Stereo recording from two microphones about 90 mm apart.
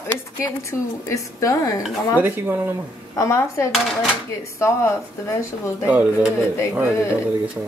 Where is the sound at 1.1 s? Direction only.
35° left (ahead or behind).